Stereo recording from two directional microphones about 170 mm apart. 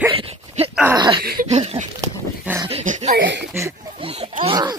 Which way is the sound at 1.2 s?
60° right (ahead or behind).